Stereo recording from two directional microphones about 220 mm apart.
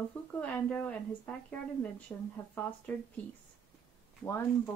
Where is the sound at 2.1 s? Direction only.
10° left (ahead or behind).